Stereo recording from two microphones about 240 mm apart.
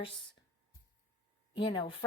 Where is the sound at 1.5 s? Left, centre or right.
Centre.